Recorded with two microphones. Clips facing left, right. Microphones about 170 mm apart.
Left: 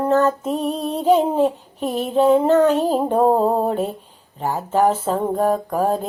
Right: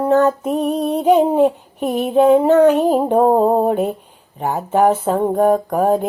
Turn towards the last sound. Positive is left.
turn(degrees=-15)  # may be behind; listen again after turning